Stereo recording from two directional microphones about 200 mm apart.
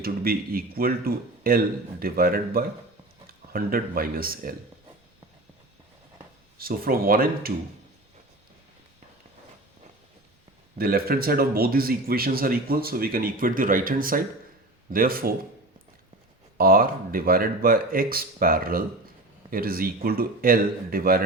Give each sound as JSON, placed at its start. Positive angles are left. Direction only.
{"t": 0.0, "sound": "speech", "side_deg": -50}
{"t": 6.6, "sound": "speech", "side_deg": -45}
{"t": 10.8, "sound": "speech", "side_deg": -50}
{"t": 16.6, "sound": "speech", "side_deg": -45}